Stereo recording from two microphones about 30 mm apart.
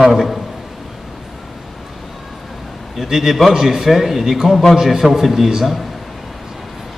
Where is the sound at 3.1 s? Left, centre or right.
Centre.